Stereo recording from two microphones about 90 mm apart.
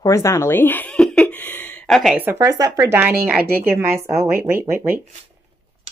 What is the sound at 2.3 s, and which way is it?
Speech, 40° right (ahead or behind).